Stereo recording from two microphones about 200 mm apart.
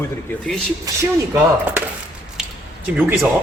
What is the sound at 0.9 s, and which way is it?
Speech, 20° right (ahead or behind).